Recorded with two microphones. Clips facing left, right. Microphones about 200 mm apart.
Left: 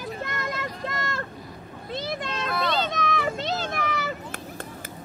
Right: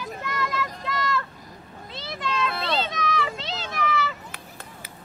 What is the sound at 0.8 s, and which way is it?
Vehicle, 50° left (ahead or behind).